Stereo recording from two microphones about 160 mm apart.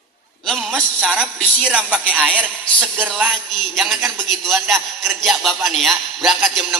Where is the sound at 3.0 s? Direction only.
5° right (ahead or behind).